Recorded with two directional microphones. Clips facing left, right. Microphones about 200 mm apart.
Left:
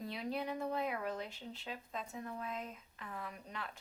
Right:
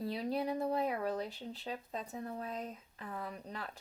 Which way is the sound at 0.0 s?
35° right (ahead or behind).